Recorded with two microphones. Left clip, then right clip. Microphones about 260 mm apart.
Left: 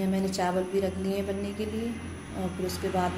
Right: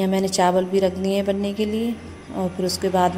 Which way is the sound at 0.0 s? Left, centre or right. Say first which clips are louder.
Right 10 dB; right.